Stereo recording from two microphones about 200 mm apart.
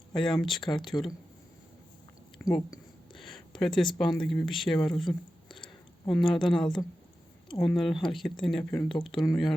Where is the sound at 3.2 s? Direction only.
Centre (ahead or behind).